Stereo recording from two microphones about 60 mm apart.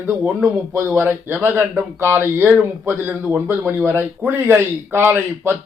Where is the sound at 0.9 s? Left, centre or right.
Right.